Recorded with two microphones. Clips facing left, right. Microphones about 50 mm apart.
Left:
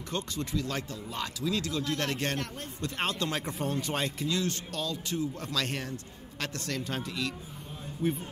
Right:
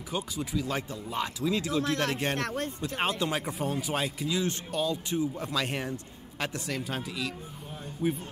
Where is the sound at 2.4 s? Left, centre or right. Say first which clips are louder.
Right 6 dB; right.